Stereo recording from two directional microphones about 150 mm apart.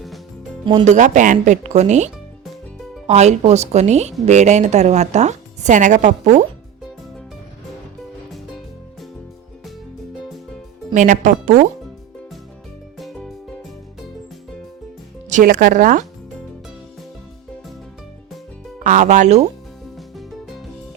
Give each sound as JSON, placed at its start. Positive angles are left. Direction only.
{"t": 0.6, "sound": "speech", "side_deg": -30}
{"t": 0.9, "sound": "speech", "side_deg": -55}
{"t": 3.1, "sound": "a woman's voice", "side_deg": -50}
{"t": 8.3, "sound": "music", "side_deg": 0}
{"t": 10.9, "sound": "speech", "side_deg": -55}
{"t": 13.0, "sound": "music", "side_deg": 0}
{"t": 15.3, "sound": "speech", "side_deg": -60}
{"t": 18.8, "sound": "a woman's voice", "side_deg": -55}
{"t": 20.0, "sound": "music", "side_deg": 0}